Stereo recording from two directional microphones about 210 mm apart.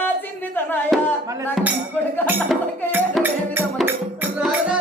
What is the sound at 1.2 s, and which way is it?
Speech, 15° right (ahead or behind).